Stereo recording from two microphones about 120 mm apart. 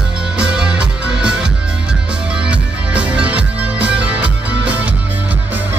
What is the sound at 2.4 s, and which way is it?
Music, 10° right (ahead or behind).